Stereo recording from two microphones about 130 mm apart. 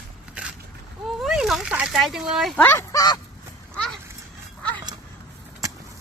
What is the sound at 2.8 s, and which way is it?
Speech, 30° left (ahead or behind).